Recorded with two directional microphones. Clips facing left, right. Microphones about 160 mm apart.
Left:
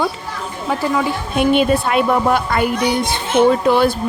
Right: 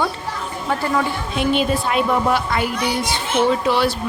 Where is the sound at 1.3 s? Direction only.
60° left (ahead or behind).